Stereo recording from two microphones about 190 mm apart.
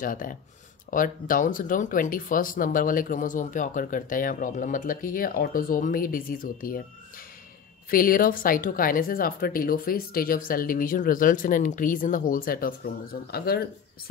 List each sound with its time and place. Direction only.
0.0 s speech: 45° left (ahead or behind)
7.9 s speech: 50° left (ahead or behind)